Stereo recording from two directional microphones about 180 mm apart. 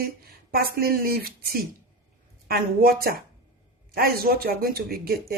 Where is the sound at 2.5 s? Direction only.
55° right (ahead or behind).